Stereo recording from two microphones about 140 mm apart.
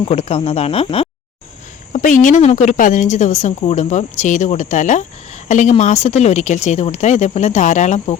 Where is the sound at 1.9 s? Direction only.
65° left (ahead or behind).